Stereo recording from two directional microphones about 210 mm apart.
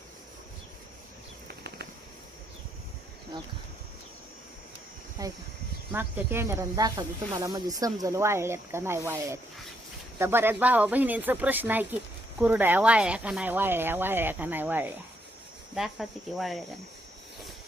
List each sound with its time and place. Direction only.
1.5 s bird flight: 50° right (ahead or behind)
5.2 s a sound: 15° right (ahead or behind)
5.9 s speech: 10° right (ahead or behind)